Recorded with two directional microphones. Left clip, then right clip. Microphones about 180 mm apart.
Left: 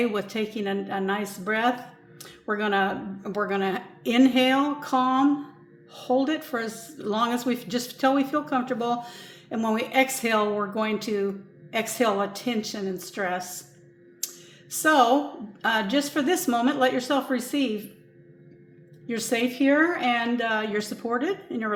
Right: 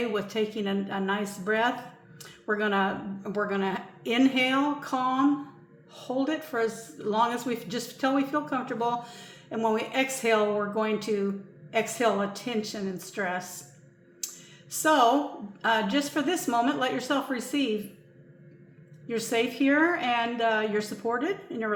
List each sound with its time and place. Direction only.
0.0 s a woman's voice: 30° left (ahead or behind)
14.7 s a woman's voice: 30° left (ahead or behind)
19.0 s a woman's voice: 30° left (ahead or behind)